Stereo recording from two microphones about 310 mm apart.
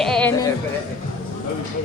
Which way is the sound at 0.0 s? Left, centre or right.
Centre.